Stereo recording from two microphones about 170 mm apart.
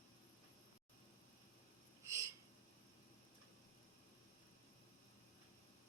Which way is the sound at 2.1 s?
20° right (ahead or behind).